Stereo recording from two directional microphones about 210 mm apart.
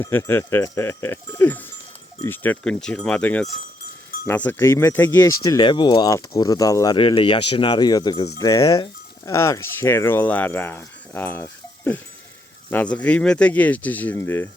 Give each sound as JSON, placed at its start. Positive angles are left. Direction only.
{"t": 0.0, "sound": "speech", "side_deg": 10}